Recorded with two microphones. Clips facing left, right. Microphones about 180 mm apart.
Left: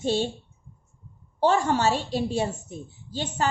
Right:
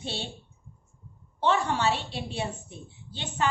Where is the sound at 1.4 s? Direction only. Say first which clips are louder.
Left 4 dB; 40° left (ahead or behind).